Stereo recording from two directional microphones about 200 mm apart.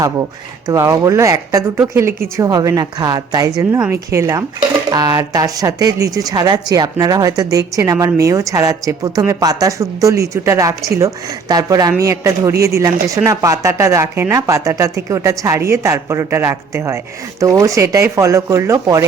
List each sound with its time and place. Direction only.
0.7 s speech: 15° right (ahead or behind)